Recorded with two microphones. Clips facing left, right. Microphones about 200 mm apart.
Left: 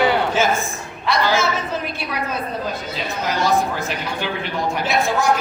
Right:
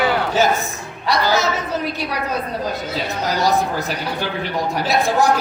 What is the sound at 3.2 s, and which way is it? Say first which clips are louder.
Speech: right 2 dB; 40° right (ahead or behind).